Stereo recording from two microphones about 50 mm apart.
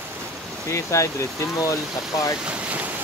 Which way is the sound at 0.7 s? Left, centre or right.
Left.